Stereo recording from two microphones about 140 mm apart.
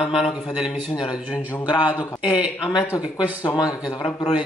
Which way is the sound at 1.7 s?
30° left (ahead or behind).